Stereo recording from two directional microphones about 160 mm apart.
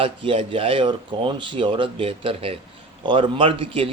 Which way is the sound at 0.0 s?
35° right (ahead or behind).